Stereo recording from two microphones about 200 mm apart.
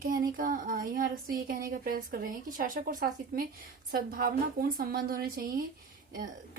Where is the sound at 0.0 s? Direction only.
45° right (ahead or behind).